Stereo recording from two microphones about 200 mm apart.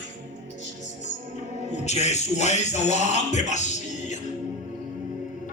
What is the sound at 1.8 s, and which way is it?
Speech, 35° left (ahead or behind).